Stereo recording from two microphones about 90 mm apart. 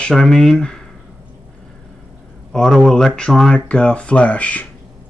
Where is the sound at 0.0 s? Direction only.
5° left (ahead or behind).